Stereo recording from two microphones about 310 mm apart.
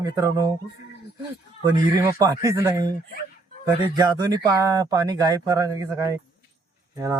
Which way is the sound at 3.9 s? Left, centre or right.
Centre.